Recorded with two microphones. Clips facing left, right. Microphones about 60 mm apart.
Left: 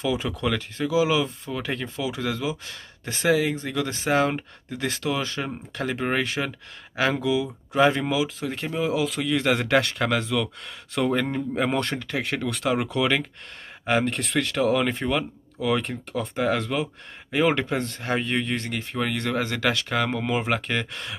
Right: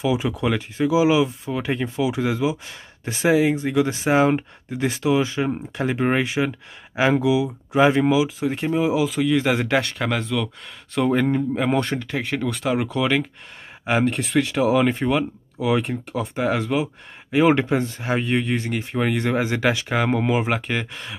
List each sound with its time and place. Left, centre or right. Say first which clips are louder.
0.0 s speech: right 4 dB; centre